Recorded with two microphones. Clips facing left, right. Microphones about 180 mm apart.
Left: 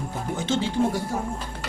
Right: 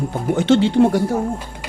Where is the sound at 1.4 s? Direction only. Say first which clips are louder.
Right 1 dB; 10° right (ahead or behind).